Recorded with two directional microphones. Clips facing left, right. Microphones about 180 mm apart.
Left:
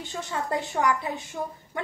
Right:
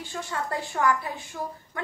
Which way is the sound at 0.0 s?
20° left (ahead or behind).